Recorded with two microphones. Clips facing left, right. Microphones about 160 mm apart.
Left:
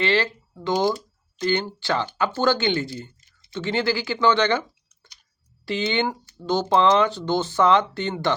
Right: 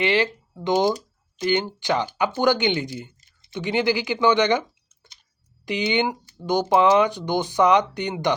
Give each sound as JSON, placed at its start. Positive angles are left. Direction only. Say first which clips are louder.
{"t": 0.0, "sound": "speech", "louder": "right 1 dB", "side_deg": -15}